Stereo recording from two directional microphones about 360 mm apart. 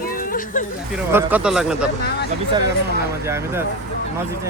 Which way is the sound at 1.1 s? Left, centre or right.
Centre.